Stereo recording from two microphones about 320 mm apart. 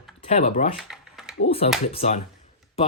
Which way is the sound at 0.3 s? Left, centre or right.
Left.